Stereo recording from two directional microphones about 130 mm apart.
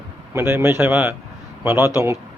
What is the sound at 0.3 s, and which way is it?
A man's voice, 20° right (ahead or behind).